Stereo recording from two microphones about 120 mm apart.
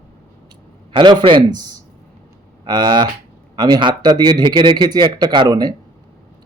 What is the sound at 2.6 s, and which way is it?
Speech, 35° right (ahead or behind).